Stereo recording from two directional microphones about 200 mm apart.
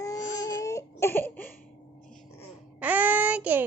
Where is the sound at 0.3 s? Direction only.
20° left (ahead or behind).